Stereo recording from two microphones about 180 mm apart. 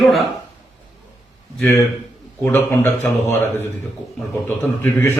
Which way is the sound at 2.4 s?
10° left (ahead or behind).